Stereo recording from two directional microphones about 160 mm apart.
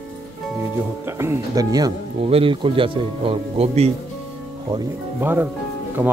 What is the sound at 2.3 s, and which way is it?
Speech, 35° right (ahead or behind).